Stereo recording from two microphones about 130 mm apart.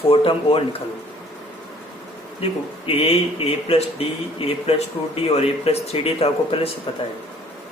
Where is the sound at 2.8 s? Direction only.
50° left (ahead or behind).